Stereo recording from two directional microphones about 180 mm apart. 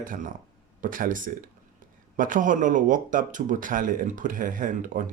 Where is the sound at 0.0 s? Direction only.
45° right (ahead or behind).